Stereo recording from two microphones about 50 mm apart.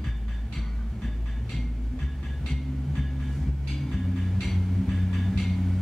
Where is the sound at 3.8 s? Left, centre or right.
Centre.